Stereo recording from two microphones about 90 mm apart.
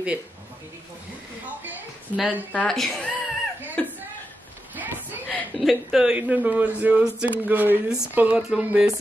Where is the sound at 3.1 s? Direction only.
20° right (ahead or behind).